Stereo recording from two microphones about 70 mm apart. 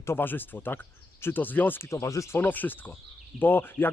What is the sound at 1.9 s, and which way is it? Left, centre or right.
Speech, left.